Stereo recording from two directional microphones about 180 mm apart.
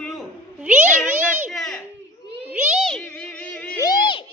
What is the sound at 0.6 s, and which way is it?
Meow, 10° right (ahead or behind).